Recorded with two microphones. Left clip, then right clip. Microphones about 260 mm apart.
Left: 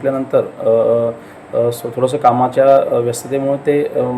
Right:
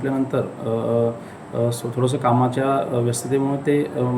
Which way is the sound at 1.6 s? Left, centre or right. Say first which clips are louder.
Left 7 dB; centre.